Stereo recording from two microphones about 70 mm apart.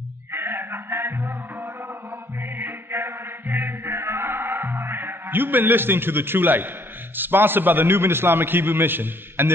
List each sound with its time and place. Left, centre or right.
0.3 s music: right
2.5 s music: right
7.2 s a man's voice: right